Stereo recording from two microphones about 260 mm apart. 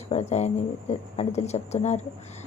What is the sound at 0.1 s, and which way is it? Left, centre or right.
A woman's voice, left.